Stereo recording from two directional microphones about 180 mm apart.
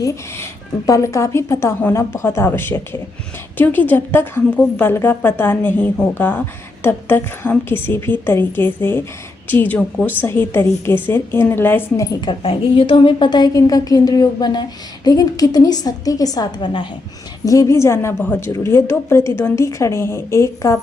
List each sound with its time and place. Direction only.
0.0 s a woman's voice: 15° left (ahead or behind)
12.2 s a woman's voice: 30° left (ahead or behind)